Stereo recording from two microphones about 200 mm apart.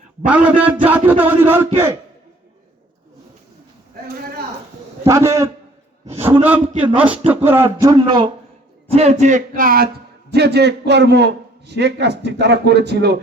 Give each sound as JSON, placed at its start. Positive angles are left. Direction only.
{"t": 0.3, "sound": "a man's voice", "side_deg": -5}
{"t": 5.0, "sound": "a man's voice", "side_deg": -15}
{"t": 8.9, "sound": "a man's voice", "side_deg": -30}